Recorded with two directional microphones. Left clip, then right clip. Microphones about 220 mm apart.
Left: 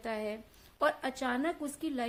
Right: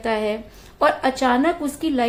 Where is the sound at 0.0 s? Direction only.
25° left (ahead or behind).